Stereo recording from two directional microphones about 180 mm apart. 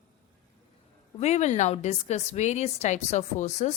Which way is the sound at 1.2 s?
40° left (ahead or behind).